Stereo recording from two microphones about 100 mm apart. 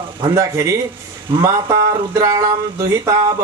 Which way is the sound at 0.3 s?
30° right (ahead or behind).